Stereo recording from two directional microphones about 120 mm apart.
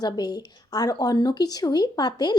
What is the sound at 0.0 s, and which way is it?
A woman's voice, 35° left (ahead or behind).